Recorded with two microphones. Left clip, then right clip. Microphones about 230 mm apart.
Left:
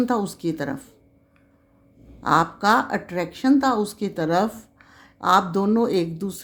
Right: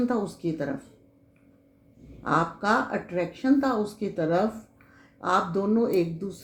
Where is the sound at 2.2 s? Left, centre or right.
Left.